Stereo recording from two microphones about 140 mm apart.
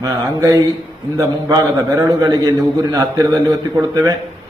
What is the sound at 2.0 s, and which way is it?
Speech, 25° right (ahead or behind).